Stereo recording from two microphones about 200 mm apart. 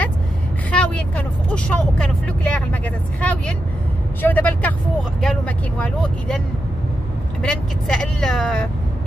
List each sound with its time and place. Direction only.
0.7 s speech: 5° left (ahead or behind)
7.4 s speech: 5° left (ahead or behind)